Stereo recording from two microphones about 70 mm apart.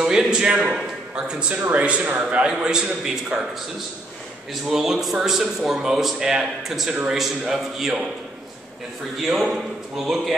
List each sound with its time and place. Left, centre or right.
0.0 s a man's voice: centre
2.4 s speech: centre
4.6 s speech: centre
9.2 s a man's voice: centre